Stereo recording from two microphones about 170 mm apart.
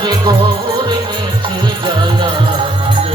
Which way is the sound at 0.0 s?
25° right (ahead or behind).